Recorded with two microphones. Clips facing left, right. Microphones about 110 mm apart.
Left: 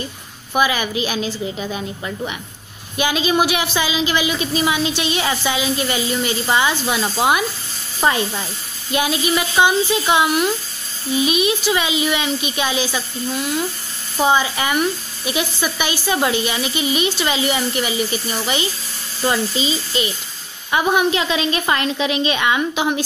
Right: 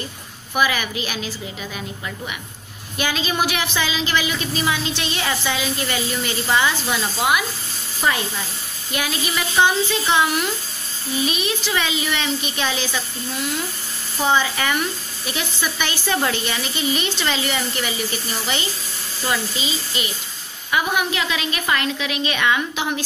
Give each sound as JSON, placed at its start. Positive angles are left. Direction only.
{"t": 0.6, "sound": "a woman's voice", "side_deg": 20}
{"t": 14.2, "sound": "speech", "side_deg": 15}
{"t": 19.9, "sound": "a woman's voice", "side_deg": 25}